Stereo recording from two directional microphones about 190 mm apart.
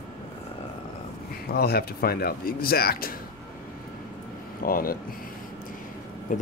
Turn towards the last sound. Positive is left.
turn(degrees=45)  # may be behind; listen again after turning